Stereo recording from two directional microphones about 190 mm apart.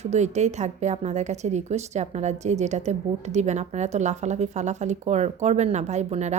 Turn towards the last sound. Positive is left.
turn(degrees=-35)  # may be behind; listen again after turning